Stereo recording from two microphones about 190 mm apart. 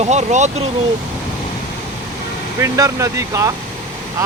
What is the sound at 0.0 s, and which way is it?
Speech, 35° right (ahead or behind).